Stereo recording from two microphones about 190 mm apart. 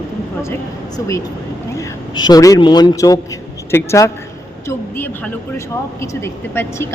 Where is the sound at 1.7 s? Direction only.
20° left (ahead or behind).